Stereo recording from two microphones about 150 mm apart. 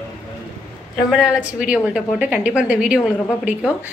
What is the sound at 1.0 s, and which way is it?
A woman's voice, 5° right (ahead or behind).